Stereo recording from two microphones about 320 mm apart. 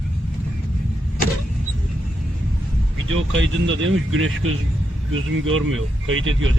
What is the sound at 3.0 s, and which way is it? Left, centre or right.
Speech, right.